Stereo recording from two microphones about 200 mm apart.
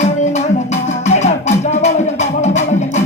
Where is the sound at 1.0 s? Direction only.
35° left (ahead or behind).